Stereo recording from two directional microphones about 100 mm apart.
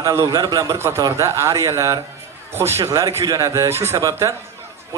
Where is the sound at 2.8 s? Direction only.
35° right (ahead or behind).